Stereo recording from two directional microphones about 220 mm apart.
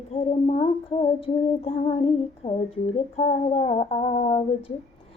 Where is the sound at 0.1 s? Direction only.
25° left (ahead or behind).